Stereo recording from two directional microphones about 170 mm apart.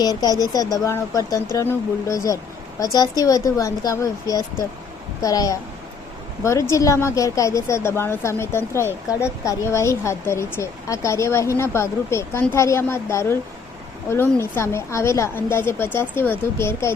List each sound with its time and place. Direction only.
0.0 s a woman's voice: 20° left (ahead or behind)